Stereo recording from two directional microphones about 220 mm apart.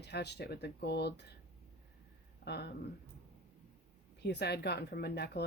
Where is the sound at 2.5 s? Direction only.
50° left (ahead or behind).